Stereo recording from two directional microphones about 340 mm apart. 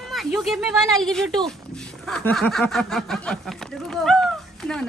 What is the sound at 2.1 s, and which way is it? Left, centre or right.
Speech, centre.